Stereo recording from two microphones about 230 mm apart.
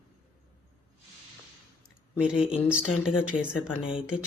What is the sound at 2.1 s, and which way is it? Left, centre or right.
Speech, centre.